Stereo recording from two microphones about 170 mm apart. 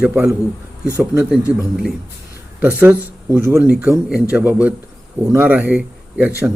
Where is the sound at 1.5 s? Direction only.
5° right (ahead or behind).